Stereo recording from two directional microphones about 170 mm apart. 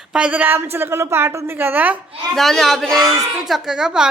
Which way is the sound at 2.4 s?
Centre (ahead or behind).